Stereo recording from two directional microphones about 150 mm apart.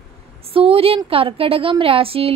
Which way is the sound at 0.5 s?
40° right (ahead or behind).